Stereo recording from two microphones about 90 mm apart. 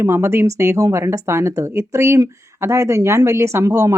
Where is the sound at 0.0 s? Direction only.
30° right (ahead or behind).